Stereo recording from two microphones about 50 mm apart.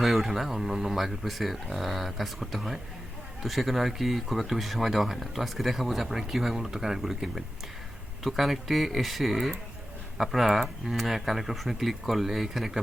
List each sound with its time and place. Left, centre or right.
0.0 s speech: centre